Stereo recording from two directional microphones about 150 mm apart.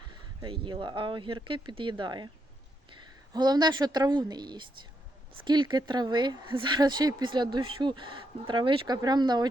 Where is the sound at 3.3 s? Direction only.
30° right (ahead or behind).